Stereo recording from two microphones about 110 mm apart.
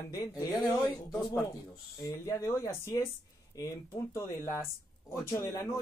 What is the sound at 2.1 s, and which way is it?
Speech, 30° left (ahead or behind).